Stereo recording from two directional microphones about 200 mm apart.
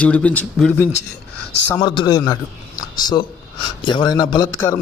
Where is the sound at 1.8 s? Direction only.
20° left (ahead or behind).